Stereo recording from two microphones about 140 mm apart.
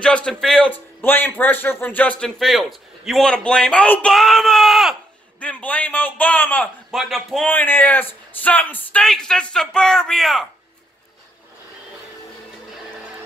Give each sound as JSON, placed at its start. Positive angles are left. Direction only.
{"t": 0.0, "sound": "a man's voice", "side_deg": 5}
{"t": 0.7, "sound": "a man's voice", "side_deg": 15}
{"t": 5.4, "sound": "speech", "side_deg": 10}
{"t": 6.9, "sound": "a man's voice", "side_deg": 0}
{"t": 7.4, "sound": "a man's voice", "side_deg": 15}